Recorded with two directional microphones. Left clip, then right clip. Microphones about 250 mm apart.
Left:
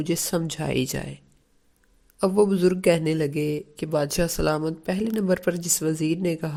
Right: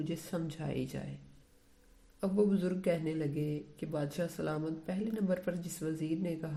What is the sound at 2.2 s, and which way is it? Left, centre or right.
Speech, left.